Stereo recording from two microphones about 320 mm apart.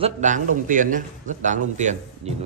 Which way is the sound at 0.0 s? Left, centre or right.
Right.